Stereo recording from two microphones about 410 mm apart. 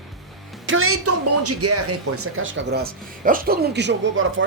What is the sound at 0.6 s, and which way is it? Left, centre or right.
A woman's voice, right.